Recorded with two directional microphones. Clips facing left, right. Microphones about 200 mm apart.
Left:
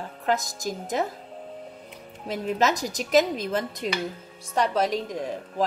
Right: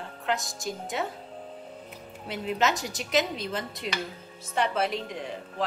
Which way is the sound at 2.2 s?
45° left (ahead or behind).